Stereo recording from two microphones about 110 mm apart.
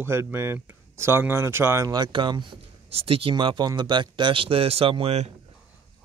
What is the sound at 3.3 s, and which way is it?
Speech, 40° right (ahead or behind).